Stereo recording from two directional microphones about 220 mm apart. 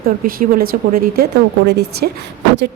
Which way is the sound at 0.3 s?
40° right (ahead or behind).